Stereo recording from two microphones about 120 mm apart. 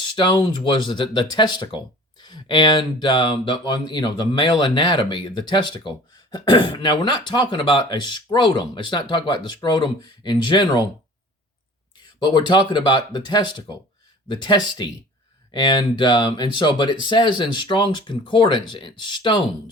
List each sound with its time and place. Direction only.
0.0 s speech: 40° left (ahead or behind)
12.2 s speech: 40° left (ahead or behind)